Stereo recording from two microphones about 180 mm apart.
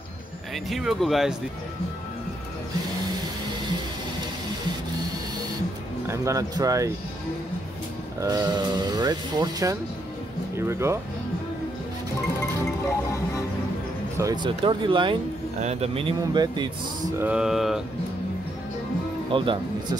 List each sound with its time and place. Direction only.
0.7 s speech: centre (ahead or behind)
6.0 s speech: 15° right (ahead or behind)
8.2 s speech: 20° right (ahead or behind)
14.1 s speech: 20° right (ahead or behind)
17.2 s speech: 5° right (ahead or behind)
19.3 s speech: 25° right (ahead or behind)